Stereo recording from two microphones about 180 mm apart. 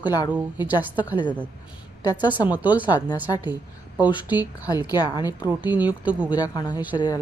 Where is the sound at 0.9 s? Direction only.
25° left (ahead or behind).